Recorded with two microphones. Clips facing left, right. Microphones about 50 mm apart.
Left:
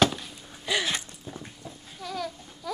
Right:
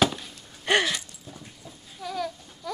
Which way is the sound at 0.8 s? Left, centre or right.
Left.